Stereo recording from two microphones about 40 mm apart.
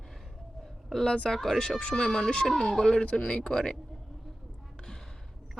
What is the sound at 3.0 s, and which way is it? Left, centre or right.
Speech, left.